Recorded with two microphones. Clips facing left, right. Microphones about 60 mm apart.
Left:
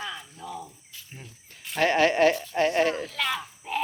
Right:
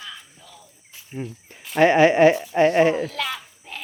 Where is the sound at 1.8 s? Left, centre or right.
Centre.